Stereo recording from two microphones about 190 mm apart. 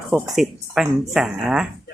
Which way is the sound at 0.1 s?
Centre (ahead or behind).